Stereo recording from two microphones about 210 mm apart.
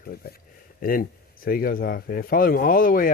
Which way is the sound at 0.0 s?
45° left (ahead or behind).